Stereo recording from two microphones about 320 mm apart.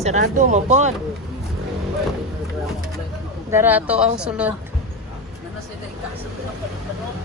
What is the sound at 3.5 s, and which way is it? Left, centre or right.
Speech, centre.